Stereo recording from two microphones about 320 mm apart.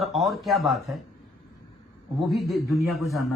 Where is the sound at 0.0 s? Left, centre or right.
Centre.